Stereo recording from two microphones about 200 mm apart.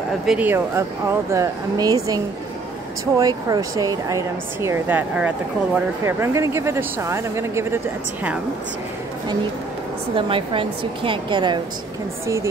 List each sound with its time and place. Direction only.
0.3 s speech: 10° right (ahead or behind)
3.2 s speech: 20° right (ahead or behind)
10.1 s a woman's voice: 25° right (ahead or behind)